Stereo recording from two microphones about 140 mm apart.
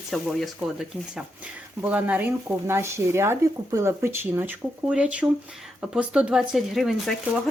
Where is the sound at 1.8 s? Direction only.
10° right (ahead or behind).